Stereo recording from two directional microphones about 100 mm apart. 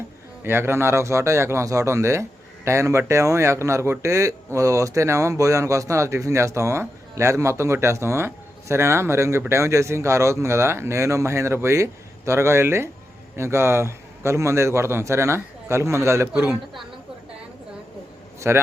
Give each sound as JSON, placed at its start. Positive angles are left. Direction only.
{"t": 0.4, "sound": "speech", "side_deg": -25}
{"t": 18.3, "sound": "a man's voice", "side_deg": -25}